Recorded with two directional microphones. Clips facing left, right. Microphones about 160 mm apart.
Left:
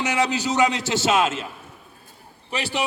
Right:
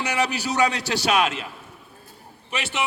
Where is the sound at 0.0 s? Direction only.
20° left (ahead or behind).